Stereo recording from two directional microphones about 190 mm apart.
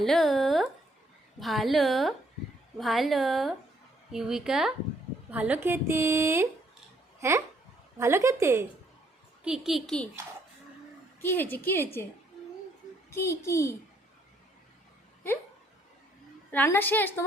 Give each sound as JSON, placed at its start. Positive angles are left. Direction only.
{"t": 0.0, "sound": "a woman's voice", "side_deg": 0}
{"t": 9.4, "sound": "a woman's voice", "side_deg": -5}
{"t": 11.2, "sound": "a woman's voice", "side_deg": 10}
{"t": 13.1, "sound": "a woman's voice", "side_deg": 15}
{"t": 16.5, "sound": "a woman's voice", "side_deg": 10}